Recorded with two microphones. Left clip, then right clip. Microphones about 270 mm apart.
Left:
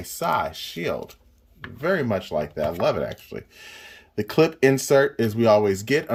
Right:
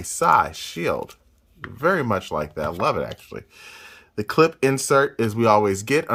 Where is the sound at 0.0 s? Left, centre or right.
Centre.